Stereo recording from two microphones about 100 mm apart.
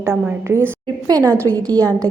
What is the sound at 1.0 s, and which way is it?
Speech, 40° right (ahead or behind).